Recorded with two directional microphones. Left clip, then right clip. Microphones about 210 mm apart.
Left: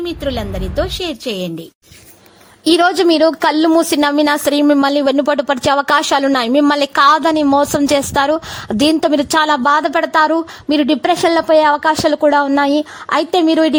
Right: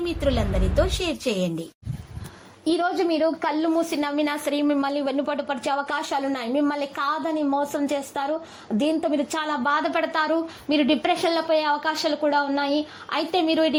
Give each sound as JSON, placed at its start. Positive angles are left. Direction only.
{"t": 0.0, "sound": "a woman's voice", "side_deg": 25}
{"t": 2.6, "sound": "a woman's voice", "side_deg": 40}